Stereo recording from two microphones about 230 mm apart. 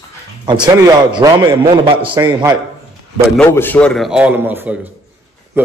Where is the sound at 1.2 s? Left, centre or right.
Centre.